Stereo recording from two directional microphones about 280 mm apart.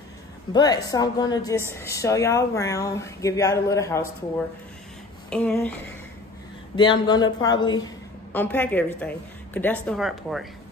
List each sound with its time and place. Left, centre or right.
0.5 s a woman's voice: centre
5.3 s a sound: centre
6.8 s a woman's voice: centre